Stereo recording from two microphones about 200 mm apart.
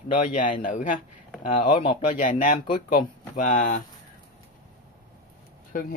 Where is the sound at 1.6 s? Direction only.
25° left (ahead or behind).